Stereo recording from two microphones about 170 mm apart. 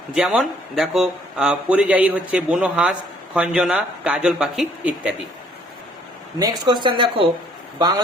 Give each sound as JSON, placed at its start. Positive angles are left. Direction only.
{"t": 0.1, "sound": "speech", "side_deg": -5}
{"t": 6.4, "sound": "speech", "side_deg": -25}